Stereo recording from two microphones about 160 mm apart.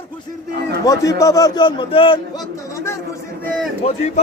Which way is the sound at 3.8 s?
45° left (ahead or behind).